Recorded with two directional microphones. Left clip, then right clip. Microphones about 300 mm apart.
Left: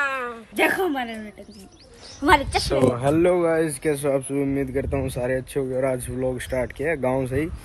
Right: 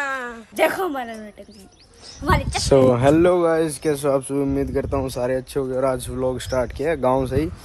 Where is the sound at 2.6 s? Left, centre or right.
Right.